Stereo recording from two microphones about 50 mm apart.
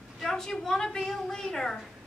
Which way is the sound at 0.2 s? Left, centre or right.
Centre.